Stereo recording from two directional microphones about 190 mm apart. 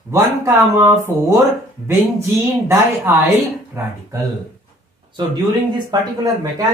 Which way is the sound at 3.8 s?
15° right (ahead or behind).